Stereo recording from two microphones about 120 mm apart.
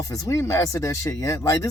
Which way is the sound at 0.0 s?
30° left (ahead or behind).